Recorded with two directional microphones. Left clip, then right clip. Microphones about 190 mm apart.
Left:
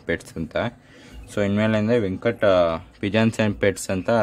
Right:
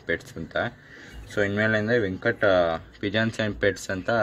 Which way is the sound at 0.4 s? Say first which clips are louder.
Left 2 dB; 25° left (ahead or behind).